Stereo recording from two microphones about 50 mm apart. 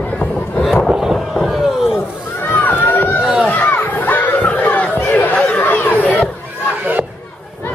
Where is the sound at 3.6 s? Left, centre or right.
Left.